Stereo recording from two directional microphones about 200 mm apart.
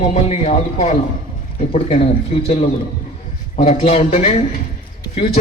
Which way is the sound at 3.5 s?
35° left (ahead or behind).